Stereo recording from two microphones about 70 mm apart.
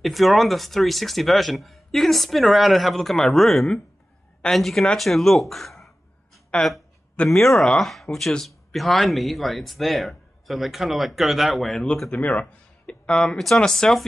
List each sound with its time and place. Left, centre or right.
0.0 s a woman's voice: centre
12.1 s speech: left